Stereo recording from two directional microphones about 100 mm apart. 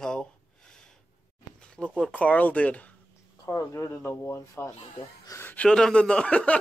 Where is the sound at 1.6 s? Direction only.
10° left (ahead or behind).